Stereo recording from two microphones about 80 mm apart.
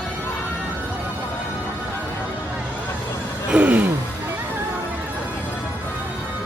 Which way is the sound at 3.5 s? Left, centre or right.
Centre.